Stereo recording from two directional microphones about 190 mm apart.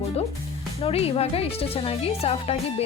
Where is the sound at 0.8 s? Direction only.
30° left (ahead or behind).